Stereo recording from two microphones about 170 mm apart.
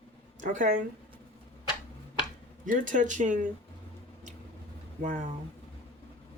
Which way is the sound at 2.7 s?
50° right (ahead or behind).